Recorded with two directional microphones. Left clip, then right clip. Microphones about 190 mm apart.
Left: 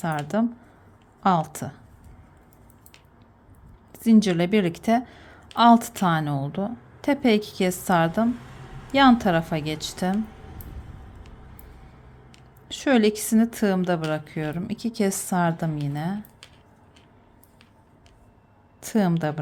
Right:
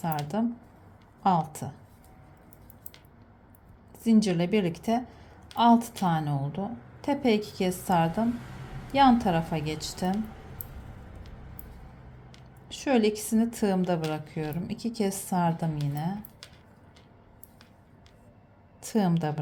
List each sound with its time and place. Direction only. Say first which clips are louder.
0.0 s a woman's voice: left 5 dB; 20° left (ahead or behind)
3.9 s a woman's voice: left 5 dB; 20° left (ahead or behind)
12.3 s a woman's voice: left 6 dB; 20° left (ahead or behind)
18.8 s a woman's voice: left 4 dB; 15° left (ahead or behind)